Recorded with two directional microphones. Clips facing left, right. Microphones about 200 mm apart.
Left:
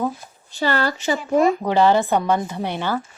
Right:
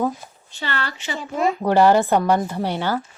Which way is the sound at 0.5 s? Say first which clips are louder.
Left 7 dB; 40° left (ahead or behind).